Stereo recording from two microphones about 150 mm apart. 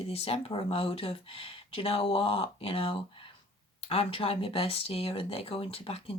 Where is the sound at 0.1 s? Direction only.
40° left (ahead or behind).